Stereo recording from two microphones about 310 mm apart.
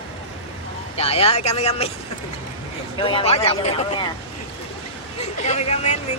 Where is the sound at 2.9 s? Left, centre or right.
Centre.